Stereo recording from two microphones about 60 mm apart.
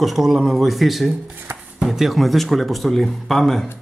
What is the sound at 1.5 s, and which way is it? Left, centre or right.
Music, right.